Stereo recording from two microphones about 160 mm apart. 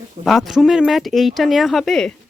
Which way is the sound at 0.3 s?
Centre (ahead or behind).